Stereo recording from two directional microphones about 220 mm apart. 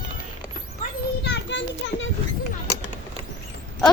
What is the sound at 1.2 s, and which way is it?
Children playing, 55° left (ahead or behind).